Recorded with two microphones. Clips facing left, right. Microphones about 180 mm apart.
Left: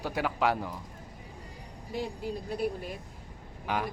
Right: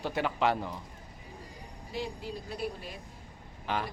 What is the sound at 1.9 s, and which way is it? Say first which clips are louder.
Speech: left 3 dB; 50° left (ahead or behind).